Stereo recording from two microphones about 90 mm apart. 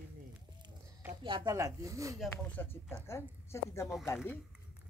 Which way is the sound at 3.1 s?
30° left (ahead or behind).